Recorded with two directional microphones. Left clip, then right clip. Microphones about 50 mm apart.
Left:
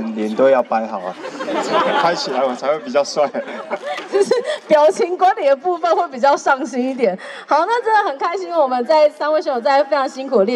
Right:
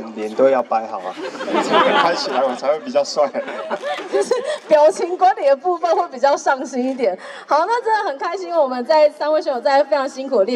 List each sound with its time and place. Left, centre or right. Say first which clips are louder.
0.2 s a woman's voice: left 2 dB; left
1.5 s speech: right 2 dB; right
2.0 s a woman's voice: left 1 dB; left